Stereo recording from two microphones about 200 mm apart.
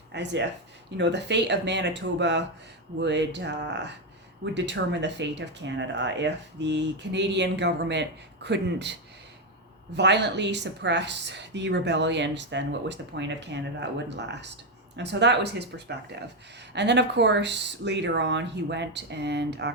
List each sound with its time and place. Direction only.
0.1 s speech: 60° right (ahead or behind)